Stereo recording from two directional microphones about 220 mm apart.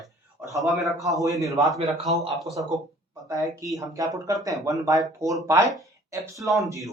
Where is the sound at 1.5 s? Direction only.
Centre (ahead or behind).